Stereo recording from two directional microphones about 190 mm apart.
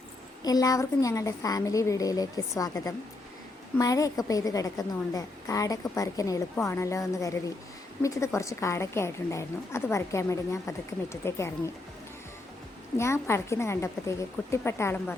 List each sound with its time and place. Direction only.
0.4 s a woman's voice: 20° left (ahead or behind)
13.0 s a woman's voice: 15° left (ahead or behind)